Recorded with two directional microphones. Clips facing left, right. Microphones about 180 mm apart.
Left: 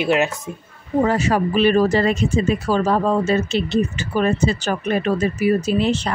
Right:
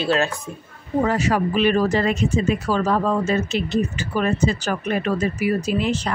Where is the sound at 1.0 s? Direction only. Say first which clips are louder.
Left 2 dB; 30° left (ahead or behind).